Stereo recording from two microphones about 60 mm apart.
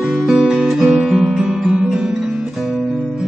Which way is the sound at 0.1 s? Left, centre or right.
Centre.